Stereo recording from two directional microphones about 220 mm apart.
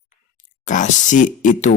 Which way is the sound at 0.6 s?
35° left (ahead or behind).